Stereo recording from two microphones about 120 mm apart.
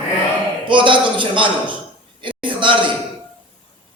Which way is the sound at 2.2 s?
45° right (ahead or behind).